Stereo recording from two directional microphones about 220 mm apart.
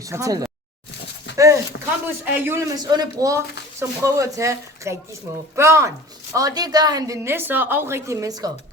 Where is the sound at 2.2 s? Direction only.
10° right (ahead or behind).